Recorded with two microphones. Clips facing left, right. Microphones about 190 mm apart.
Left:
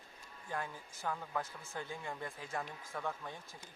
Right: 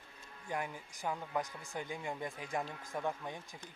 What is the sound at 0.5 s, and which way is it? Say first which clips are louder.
A man's voice: right 2 dB; 15° right (ahead or behind).